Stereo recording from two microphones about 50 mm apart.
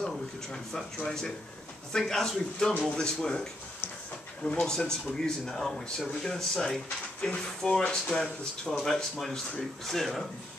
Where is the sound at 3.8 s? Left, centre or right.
Left.